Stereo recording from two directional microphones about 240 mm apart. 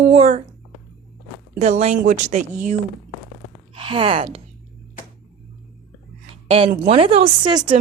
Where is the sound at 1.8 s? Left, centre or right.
Right.